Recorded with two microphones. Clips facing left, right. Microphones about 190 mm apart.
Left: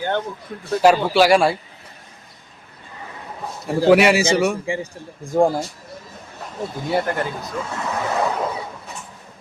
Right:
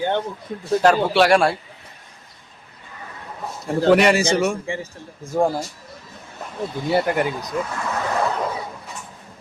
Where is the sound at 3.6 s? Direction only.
5° left (ahead or behind).